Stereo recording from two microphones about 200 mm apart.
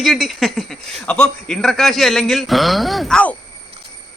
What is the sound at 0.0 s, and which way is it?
Speech, centre (ahead or behind).